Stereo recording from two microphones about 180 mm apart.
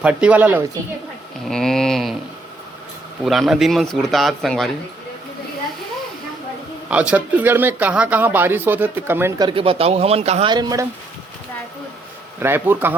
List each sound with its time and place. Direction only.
0.0 s speech: 5° right (ahead or behind)
1.5 s speech: 5° left (ahead or behind)
3.2 s speech: centre (ahead or behind)
6.8 s speech: 5° right (ahead or behind)
9.4 s speech: 30° right (ahead or behind)
10.5 s speech: 20° right (ahead or behind)
12.4 s speech: 10° right (ahead or behind)